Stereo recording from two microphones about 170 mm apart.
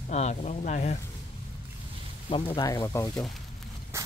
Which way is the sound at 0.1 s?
40° left (ahead or behind).